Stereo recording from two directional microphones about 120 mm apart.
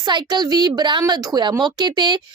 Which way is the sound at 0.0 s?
40° right (ahead or behind).